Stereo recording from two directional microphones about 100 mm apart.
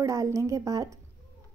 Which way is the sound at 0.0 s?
30° right (ahead or behind).